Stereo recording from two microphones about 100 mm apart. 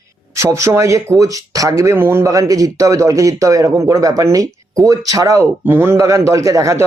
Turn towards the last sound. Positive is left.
turn(degrees=-35)  # may be behind; listen again after turning